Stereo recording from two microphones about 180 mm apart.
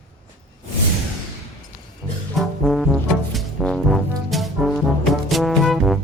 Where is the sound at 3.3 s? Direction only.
5° left (ahead or behind).